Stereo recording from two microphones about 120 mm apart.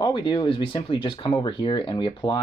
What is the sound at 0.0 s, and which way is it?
Speech, 40° left (ahead or behind).